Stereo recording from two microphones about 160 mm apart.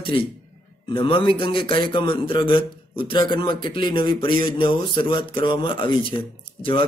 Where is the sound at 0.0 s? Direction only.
35° left (ahead or behind).